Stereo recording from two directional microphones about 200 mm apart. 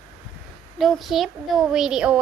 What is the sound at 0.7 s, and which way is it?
A woman's voice, centre (ahead or behind).